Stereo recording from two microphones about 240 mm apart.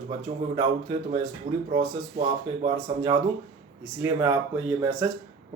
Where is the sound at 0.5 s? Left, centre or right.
Centre.